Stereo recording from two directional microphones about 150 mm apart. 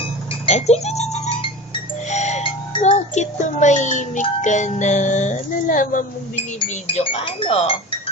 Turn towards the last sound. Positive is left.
turn(degrees=40)  # may be behind; listen again after turning